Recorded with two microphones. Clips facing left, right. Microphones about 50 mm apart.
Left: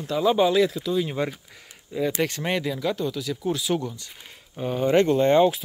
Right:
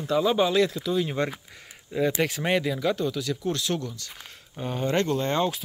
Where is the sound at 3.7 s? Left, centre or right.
Centre.